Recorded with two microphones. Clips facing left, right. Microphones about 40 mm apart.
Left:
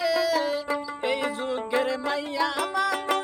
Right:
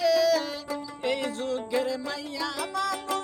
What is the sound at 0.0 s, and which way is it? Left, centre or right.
Music, centre.